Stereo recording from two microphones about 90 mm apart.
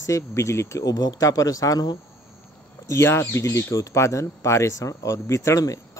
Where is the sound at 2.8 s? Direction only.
30° left (ahead or behind).